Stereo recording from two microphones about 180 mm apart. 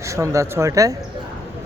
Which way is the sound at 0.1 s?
15° right (ahead or behind).